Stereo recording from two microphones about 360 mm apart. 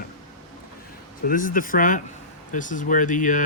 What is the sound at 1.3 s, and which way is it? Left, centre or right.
Speech, left.